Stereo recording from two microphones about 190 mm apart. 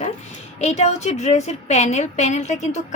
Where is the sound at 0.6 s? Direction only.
35° left (ahead or behind).